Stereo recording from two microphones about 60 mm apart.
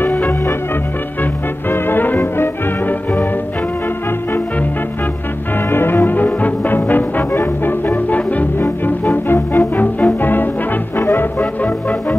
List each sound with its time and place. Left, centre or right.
0.0 s music: left
1.7 s music: left
5.7 s music: left
11.6 s music: left